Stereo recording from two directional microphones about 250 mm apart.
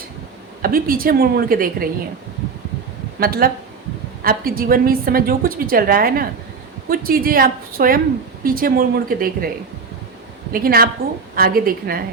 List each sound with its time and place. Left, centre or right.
0.6 s a woman's voice: right
3.2 s a woman's voice: right
10.5 s a woman's voice: right